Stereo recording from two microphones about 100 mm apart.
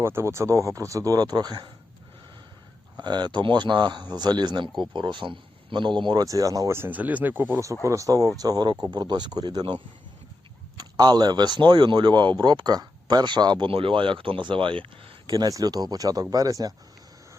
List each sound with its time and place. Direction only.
0.0 s speech: 25° right (ahead or behind); by 1.7 s 45° right (ahead or behind)
3.0 s speech: 45° right (ahead or behind)
6.2 s speech: 35° right (ahead or behind); by 7.6 s 20° right (ahead or behind)
7.9 s speech: 35° right (ahead or behind)
10.8 s speech: 45° right (ahead or behind)
13.7 s speech: 65° right (ahead or behind)
15.4 s speech: 40° right (ahead or behind)